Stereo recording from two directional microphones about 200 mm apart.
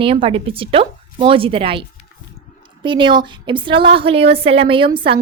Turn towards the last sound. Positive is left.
turn(degrees=-25)  # may be behind; listen again after turning